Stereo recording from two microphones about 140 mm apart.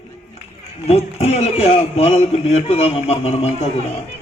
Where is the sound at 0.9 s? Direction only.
50° left (ahead or behind).